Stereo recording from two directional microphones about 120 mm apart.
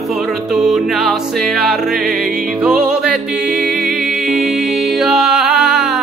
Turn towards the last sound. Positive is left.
turn(degrees=-5)  # may be behind; listen again after turning